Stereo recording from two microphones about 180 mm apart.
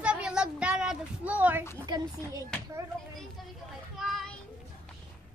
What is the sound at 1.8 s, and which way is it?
Speech, 20° right (ahead or behind).